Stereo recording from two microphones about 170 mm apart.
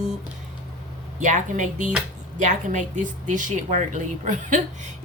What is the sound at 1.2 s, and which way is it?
A woman's voice, 45° right (ahead or behind).